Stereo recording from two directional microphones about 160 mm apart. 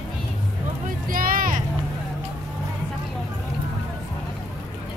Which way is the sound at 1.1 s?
65° right (ahead or behind).